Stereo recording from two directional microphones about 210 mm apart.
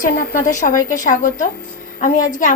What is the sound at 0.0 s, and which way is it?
A woman's voice, 40° left (ahead or behind).